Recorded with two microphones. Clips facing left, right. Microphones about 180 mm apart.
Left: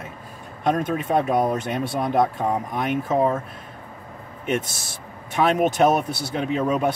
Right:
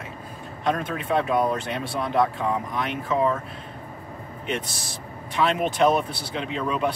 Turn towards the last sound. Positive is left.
turn(degrees=45)  # may be behind; listen again after turning